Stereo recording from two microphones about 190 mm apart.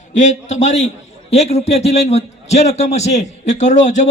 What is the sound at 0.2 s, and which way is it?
A man's voice, 40° left (ahead or behind).